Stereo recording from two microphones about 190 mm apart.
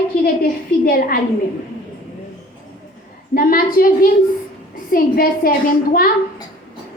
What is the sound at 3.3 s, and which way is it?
A woman's voice, 50° left (ahead or behind).